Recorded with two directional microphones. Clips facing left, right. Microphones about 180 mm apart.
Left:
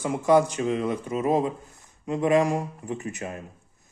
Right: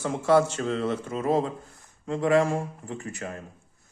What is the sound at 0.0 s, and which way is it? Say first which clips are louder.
A man's voice: left 1 dB; 15° left (ahead or behind).